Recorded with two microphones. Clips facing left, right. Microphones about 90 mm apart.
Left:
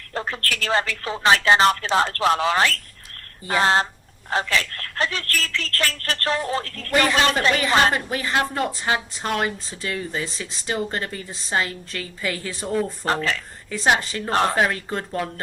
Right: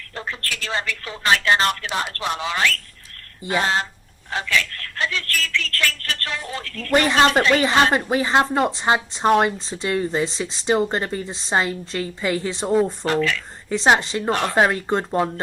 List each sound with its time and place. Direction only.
0.1 s speech: 35° left (ahead or behind)
2.3 s speech: 35° left (ahead or behind)
7.1 s a woman's voice: 35° right (ahead or behind)
13.1 s speech: 35° left (ahead or behind)
13.7 s speech: 30° right (ahead or behind)